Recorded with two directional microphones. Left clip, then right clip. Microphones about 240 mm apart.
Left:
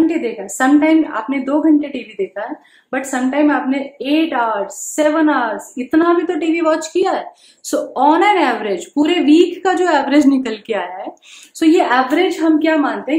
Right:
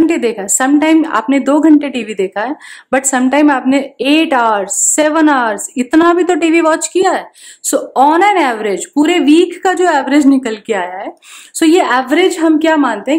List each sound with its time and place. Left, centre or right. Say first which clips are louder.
0.0 s a woman's voice: right 4 dB; right
11.6 s a woman's voice: right 2 dB; right